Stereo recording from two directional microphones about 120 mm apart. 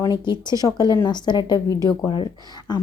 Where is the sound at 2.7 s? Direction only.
35° left (ahead or behind).